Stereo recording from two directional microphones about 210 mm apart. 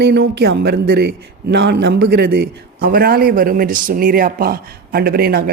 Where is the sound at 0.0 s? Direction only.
50° right (ahead or behind).